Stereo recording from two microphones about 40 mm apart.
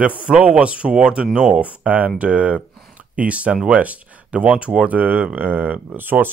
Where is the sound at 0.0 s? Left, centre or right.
Right.